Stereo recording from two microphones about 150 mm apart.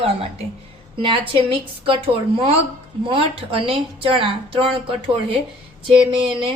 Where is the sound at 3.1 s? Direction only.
35° right (ahead or behind).